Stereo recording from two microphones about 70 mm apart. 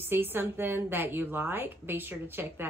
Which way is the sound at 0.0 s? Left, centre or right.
Right.